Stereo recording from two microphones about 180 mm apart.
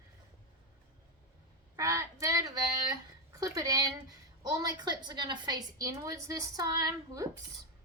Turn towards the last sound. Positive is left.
turn(degrees=-20)  # may be behind; listen again after turning